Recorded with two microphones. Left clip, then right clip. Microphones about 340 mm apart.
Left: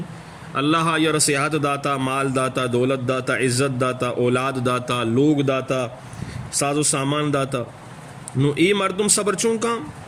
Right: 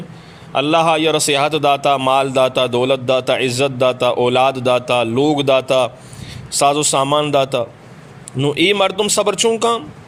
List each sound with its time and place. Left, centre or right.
0.5 s a man's voice: centre
7.0 s a man's voice: right
7.3 s a man's voice: centre